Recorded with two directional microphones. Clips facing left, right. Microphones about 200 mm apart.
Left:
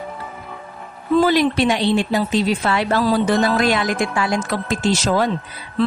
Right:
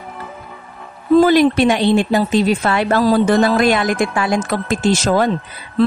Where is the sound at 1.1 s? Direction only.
50° right (ahead or behind).